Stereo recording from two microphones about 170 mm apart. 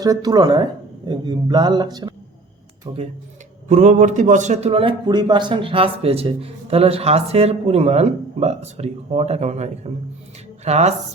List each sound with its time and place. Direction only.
0.0 s speech: 20° right (ahead or behind)
3.7 s a man's voice: 45° right (ahead or behind)